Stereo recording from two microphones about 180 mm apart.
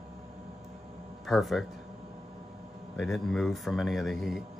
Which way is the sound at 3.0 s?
Centre (ahead or behind).